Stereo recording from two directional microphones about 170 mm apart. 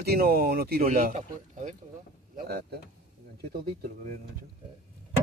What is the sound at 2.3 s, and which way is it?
Speech, 70° right (ahead or behind).